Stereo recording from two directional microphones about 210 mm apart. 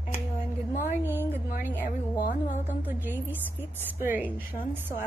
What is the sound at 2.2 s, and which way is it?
Music, 35° left (ahead or behind).